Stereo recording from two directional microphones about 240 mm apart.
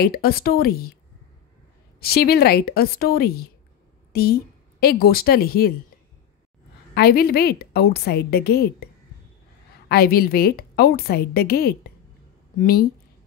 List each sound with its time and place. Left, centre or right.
0.0 s a woman's voice: left
2.0 s a woman's voice: left
6.9 s a woman's voice: left
9.8 s a woman's voice: left